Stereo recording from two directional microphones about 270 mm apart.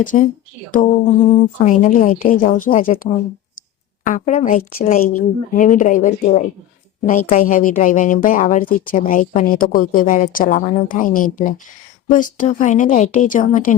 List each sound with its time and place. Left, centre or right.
0.0 s speech: left